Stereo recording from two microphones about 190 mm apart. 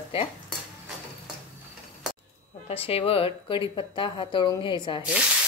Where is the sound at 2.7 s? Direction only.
30° left (ahead or behind).